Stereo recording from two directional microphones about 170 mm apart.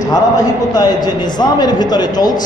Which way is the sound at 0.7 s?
25° left (ahead or behind).